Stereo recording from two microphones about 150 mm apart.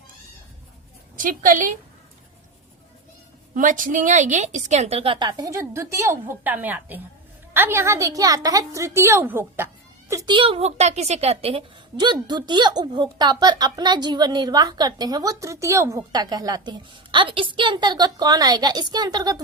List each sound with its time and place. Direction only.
1.1 s a woman's voice: 65° right (ahead or behind)
3.5 s a woman's voice: 60° right (ahead or behind); by 9.6 s 15° right (ahead or behind)
10.1 s a woman's voice: 25° right (ahead or behind)